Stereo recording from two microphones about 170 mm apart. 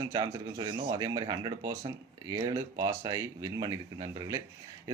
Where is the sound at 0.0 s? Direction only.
25° right (ahead or behind).